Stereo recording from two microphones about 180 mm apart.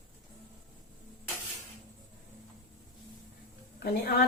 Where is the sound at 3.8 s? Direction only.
65° left (ahead or behind).